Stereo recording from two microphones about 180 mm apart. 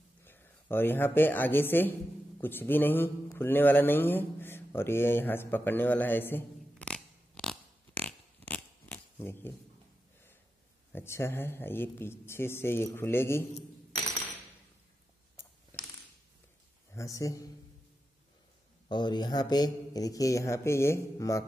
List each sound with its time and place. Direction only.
0.2 s speech: 10° left (ahead or behind)
2.4 s a sound: 10° left (ahead or behind)
10.9 s speech: 10° left (ahead or behind)
15.7 s a sound: 15° left (ahead or behind)
16.9 s speech: 20° left (ahead or behind)
18.9 s speech: 25° left (ahead or behind)